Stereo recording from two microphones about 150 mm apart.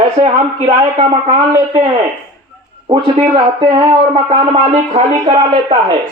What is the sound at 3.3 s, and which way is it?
Speech, 30° right (ahead or behind).